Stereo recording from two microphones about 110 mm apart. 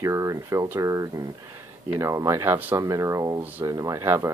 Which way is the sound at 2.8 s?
30° right (ahead or behind).